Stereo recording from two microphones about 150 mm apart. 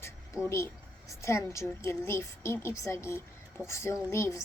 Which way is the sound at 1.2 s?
20° left (ahead or behind).